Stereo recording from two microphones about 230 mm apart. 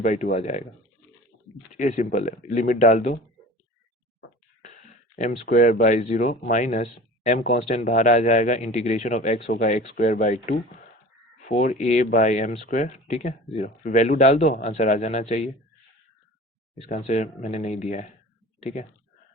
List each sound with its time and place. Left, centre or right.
0.0 s speech: left
1.7 s speech: left
5.1 s speech: left
17.0 s speech: left